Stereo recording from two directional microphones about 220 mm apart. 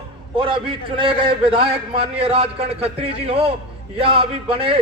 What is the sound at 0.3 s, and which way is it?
A man's voice, 25° right (ahead or behind).